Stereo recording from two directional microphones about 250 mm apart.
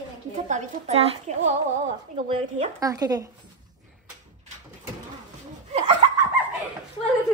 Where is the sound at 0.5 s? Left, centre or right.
Right.